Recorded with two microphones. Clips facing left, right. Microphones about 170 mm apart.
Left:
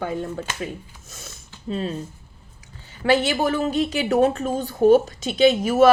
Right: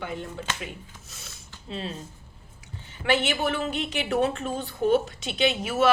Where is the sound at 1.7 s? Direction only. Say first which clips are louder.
Left 7 dB; 45° left (ahead or behind).